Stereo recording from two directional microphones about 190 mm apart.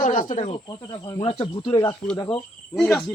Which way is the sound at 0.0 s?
40° left (ahead or behind).